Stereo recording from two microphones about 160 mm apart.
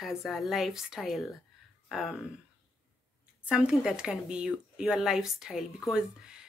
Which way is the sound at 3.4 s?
5° right (ahead or behind).